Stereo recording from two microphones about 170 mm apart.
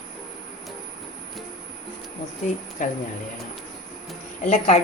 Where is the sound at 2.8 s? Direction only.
50° left (ahead or behind).